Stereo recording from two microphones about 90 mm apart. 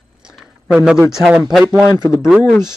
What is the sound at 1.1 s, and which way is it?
Speech, 5° right (ahead or behind).